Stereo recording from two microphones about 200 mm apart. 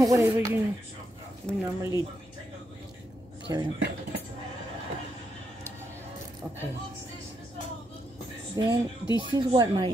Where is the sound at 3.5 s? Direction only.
20° right (ahead or behind).